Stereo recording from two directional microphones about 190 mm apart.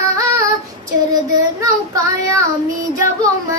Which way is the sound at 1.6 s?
15° right (ahead or behind).